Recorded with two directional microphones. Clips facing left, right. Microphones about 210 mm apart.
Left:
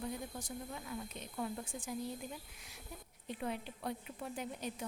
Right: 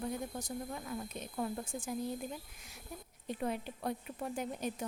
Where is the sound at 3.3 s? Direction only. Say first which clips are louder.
Right 4 dB; 45° right (ahead or behind).